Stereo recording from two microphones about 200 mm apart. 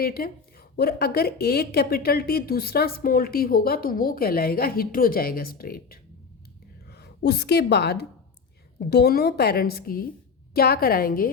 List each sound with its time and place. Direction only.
0.0 s a woman's voice: 50° left (ahead or behind)